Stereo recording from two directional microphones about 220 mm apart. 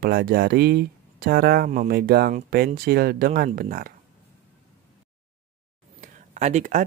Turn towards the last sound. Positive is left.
turn(degrees=-35)  # may be behind; listen again after turning